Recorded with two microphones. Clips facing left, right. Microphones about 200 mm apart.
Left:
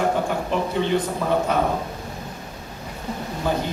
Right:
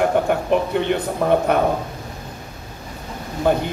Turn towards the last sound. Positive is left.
turn(degrees=-55)  # may be behind; listen again after turning